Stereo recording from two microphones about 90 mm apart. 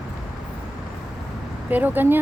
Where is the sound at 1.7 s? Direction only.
20° right (ahead or behind).